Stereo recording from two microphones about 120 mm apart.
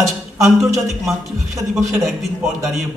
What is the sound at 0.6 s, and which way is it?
Speech, centre (ahead or behind).